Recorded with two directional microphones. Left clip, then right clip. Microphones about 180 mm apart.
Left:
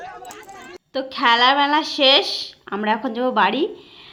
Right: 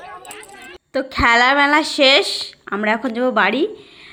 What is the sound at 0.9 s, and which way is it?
A woman's voice, 25° right (ahead or behind).